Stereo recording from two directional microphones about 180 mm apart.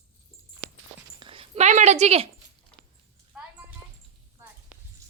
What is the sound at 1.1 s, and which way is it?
Dog, 30° right (ahead or behind).